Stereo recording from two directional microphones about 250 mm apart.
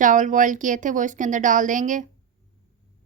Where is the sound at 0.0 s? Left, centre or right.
Right.